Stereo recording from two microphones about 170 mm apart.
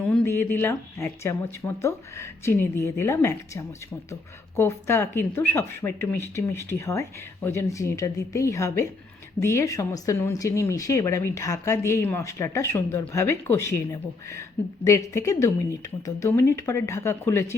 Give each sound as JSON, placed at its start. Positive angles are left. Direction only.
{"t": 0.0, "sound": "speech", "side_deg": 10}